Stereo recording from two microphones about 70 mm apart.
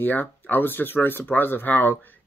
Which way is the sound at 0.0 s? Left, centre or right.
Left.